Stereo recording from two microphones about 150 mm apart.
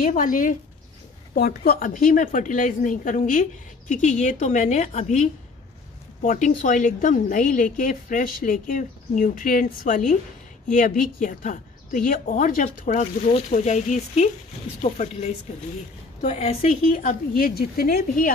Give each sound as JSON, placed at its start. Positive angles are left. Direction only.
{"t": 0.0, "sound": "a woman's voice", "side_deg": 65}
{"t": 1.3, "sound": "a woman's voice", "side_deg": 85}
{"t": 12.6, "sound": "speech", "side_deg": 50}
{"t": 17.3, "sound": "speech", "side_deg": 80}